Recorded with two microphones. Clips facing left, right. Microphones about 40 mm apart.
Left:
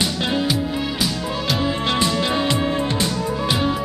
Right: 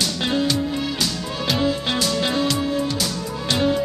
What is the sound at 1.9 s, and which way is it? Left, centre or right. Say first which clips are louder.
Music: left 2 dB; left.